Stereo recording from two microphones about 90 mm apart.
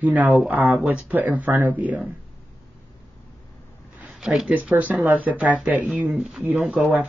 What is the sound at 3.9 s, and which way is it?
Speech, 5° right (ahead or behind).